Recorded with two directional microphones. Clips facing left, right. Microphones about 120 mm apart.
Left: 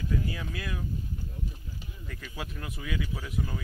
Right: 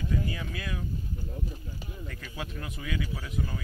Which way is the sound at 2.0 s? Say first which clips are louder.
Left 1 dB; 5° left (ahead or behind).